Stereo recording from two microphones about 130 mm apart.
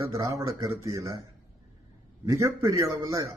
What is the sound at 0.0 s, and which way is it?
A man's voice, 25° right (ahead or behind).